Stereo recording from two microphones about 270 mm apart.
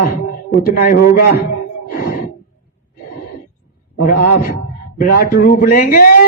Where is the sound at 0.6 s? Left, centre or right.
Left.